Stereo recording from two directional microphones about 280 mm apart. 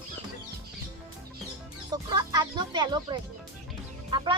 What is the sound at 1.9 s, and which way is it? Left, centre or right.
A woman's voice, centre.